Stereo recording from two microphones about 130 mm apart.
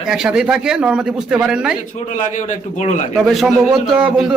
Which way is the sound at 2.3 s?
70° left (ahead or behind).